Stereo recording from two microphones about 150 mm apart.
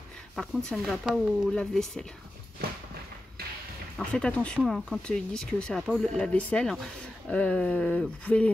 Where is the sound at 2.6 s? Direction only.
90° right.